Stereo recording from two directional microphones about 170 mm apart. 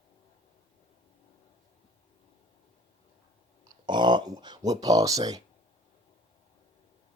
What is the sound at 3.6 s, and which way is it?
Speech, 25° right (ahead or behind).